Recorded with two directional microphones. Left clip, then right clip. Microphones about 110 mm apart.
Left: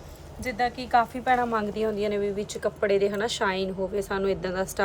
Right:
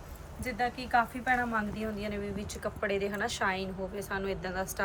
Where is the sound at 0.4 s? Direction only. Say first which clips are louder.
Left 5 dB; 10° left (ahead or behind).